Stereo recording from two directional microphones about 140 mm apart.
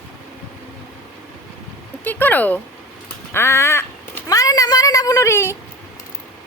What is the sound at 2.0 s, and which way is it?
Speech, 15° left (ahead or behind).